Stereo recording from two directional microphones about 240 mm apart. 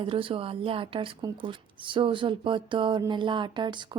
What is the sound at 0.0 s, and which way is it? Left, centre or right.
A woman's voice, right.